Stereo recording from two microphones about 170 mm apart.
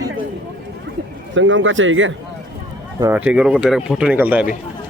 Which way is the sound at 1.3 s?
90° right.